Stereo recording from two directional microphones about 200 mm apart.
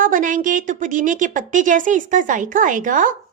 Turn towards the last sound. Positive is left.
turn(degrees=-40)  # may be behind; listen again after turning